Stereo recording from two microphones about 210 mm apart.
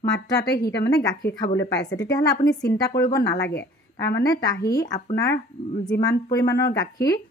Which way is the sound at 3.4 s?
50° left (ahead or behind).